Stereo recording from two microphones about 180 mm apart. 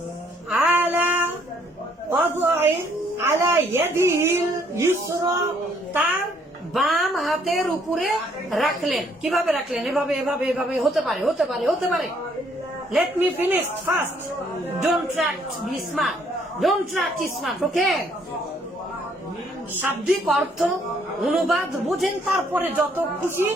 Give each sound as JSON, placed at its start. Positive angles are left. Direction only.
{"t": 0.5, "sound": "a sound", "side_deg": -10}
{"t": 3.2, "sound": "a woman's voice", "side_deg": -15}
{"t": 6.7, "sound": "a woman's voice", "side_deg": 0}
{"t": 16.6, "sound": "a woman's voice", "side_deg": 0}
{"t": 19.8, "sound": "a woman's voice", "side_deg": 0}
{"t": 22.6, "sound": "a woman's voice", "side_deg": -10}